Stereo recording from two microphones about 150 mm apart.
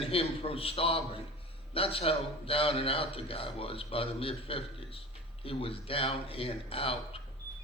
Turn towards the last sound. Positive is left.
turn(degrees=40)  # may be behind; listen again after turning